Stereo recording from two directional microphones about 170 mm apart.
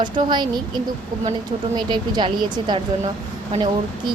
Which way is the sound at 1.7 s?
25° right (ahead or behind).